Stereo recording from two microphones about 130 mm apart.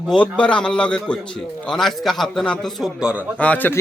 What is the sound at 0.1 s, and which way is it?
A man's voice, 10° left (ahead or behind).